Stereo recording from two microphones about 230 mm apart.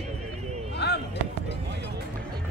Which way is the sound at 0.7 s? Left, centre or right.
Left.